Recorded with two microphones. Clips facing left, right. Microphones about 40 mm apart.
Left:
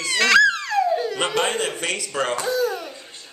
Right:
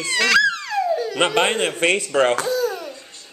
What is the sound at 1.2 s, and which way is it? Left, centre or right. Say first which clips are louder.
Speech: right 4 dB; right.